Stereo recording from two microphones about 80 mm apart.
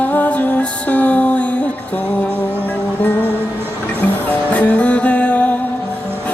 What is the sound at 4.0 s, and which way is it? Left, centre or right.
Music, centre.